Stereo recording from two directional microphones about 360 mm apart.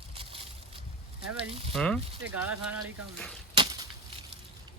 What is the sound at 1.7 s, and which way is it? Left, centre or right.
Speech, centre.